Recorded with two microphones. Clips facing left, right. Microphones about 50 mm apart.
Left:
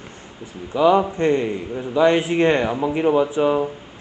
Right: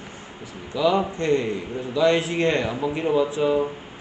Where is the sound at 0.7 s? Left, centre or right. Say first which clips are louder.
Left 5 dB; left.